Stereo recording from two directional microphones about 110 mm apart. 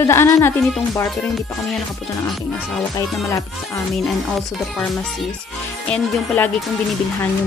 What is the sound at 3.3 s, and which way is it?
Speech, 30° left (ahead or behind).